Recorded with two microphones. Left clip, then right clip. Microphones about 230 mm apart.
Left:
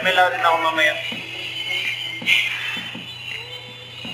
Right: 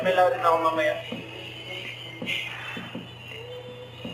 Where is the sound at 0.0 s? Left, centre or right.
Centre.